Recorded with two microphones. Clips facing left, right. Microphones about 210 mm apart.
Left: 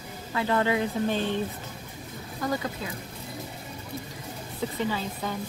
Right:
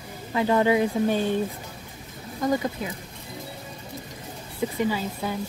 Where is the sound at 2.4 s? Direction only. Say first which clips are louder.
Right 5 dB; 20° right (ahead or behind).